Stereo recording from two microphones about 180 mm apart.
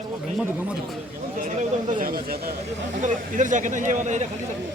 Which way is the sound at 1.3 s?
45° right (ahead or behind).